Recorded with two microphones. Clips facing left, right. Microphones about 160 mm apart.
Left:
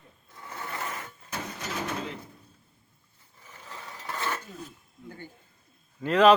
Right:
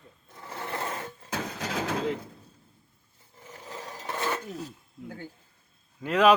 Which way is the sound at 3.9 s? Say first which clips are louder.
Right 2 dB; 20° right (ahead or behind).